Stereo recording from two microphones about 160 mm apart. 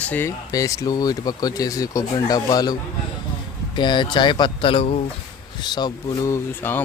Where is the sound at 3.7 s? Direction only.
30° left (ahead or behind).